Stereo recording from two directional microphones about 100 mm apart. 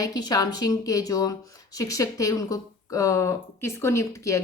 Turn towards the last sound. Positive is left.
turn(degrees=30)  # may be behind; listen again after turning